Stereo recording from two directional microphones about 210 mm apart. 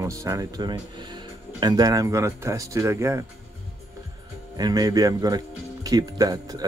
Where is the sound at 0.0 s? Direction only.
15° right (ahead or behind).